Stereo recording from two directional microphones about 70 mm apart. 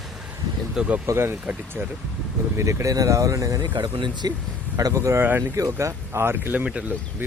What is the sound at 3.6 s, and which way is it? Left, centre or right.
Speech, right.